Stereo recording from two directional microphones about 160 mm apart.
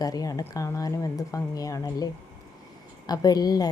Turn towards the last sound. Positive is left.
turn(degrees=25)  # may be behind; listen again after turning